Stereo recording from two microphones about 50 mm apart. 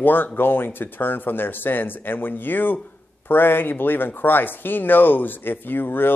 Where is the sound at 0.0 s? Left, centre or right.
Left.